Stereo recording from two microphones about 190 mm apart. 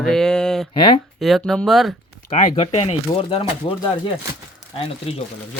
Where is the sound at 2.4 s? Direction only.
35° left (ahead or behind).